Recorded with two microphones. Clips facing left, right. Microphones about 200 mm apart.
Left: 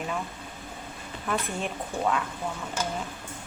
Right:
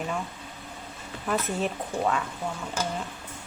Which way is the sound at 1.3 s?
Centre (ahead or behind).